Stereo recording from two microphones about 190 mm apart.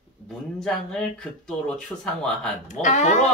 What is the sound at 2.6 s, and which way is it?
Speech, 40° left (ahead or behind).